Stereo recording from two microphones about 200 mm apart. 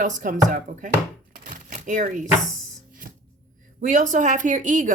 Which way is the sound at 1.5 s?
40° right (ahead or behind).